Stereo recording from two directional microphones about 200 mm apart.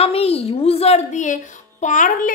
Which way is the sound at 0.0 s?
30° left (ahead or behind).